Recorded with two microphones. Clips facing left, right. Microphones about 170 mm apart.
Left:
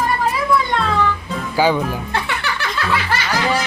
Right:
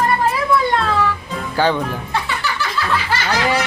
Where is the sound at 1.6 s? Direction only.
10° left (ahead or behind).